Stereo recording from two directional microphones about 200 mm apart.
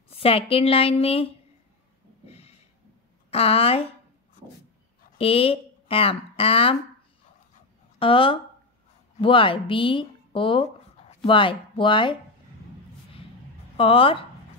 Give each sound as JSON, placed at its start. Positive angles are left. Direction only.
{"t": 0.2, "sound": "a woman's voice", "side_deg": 30}
{"t": 2.2, "sound": "snort", "side_deg": 30}
{"t": 3.3, "sound": "a woman's voice", "side_deg": 30}
{"t": 5.1, "sound": "speech", "side_deg": 30}
{"t": 8.0, "sound": "a woman's voice", "side_deg": 25}
{"t": 13.7, "sound": "a woman's voice", "side_deg": 30}